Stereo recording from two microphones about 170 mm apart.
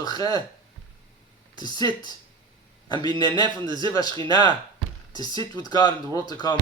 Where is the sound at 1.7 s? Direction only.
25° left (ahead or behind).